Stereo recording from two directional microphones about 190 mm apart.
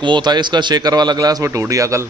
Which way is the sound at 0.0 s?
25° right (ahead or behind).